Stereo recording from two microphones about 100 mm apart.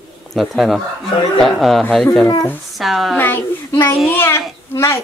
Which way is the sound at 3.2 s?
20° left (ahead or behind).